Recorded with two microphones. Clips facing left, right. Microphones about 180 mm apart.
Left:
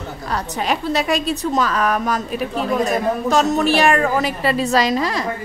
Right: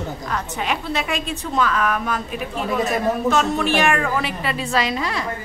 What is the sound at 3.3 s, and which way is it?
A woman's voice, 40° left (ahead or behind).